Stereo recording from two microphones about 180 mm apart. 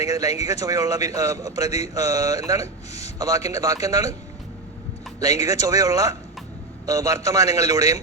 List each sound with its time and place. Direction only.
0.1 s a man's voice: 20° right (ahead or behind)
5.2 s a man's voice: 20° right (ahead or behind)